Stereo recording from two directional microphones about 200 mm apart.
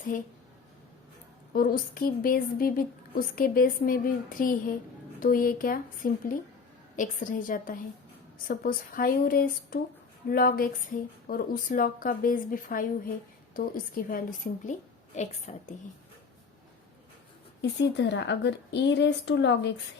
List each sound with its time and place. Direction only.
0.1 s a woman's voice: 45° left (ahead or behind)
1.5 s a woman's voice: 45° left (ahead or behind)
17.6 s a woman's voice: 60° left (ahead or behind)